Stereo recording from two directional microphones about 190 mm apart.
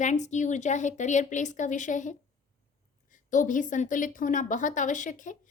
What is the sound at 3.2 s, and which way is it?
A woman's voice, 45° left (ahead or behind).